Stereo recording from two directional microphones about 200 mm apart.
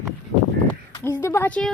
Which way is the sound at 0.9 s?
15° left (ahead or behind).